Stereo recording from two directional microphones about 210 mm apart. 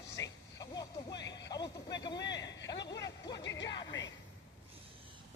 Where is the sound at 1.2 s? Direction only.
55° left (ahead or behind).